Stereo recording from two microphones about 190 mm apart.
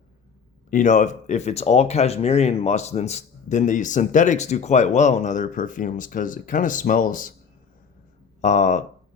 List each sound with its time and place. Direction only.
0.7 s speech: 40° left (ahead or behind)
8.4 s speech: 40° left (ahead or behind)